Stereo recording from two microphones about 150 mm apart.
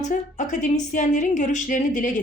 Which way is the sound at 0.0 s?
55° left (ahead or behind).